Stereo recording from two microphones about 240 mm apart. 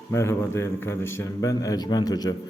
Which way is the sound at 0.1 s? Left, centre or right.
Centre.